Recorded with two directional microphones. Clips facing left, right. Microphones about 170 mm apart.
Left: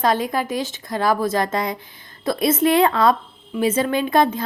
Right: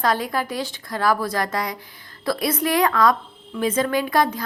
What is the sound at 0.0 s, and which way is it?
A woman's voice, 20° left (ahead or behind).